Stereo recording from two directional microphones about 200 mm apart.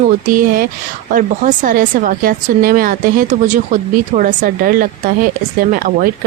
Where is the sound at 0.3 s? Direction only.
45° right (ahead or behind).